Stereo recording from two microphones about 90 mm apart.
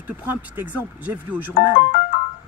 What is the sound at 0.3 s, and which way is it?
Speech, 20° right (ahead or behind).